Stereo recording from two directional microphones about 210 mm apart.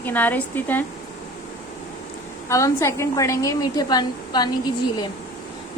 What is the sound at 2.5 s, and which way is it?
A woman's voice, 15° left (ahead or behind).